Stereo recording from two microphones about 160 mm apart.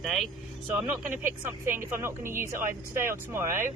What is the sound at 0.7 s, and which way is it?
Speech, 15° right (ahead or behind).